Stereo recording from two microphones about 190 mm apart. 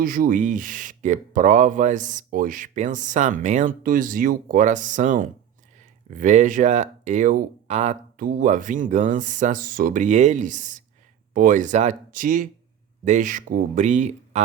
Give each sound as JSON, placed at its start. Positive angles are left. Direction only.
{"t": 0.0, "sound": "speech", "side_deg": -50}